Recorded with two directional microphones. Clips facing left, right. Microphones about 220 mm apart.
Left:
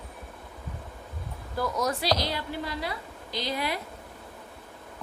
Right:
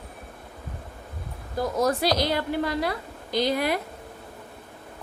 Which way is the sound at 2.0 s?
55° right (ahead or behind).